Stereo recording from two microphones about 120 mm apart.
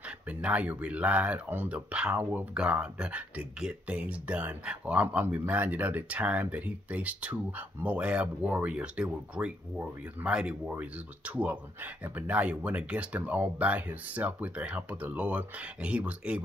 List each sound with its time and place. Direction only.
0.3 s speech: 10° right (ahead or behind)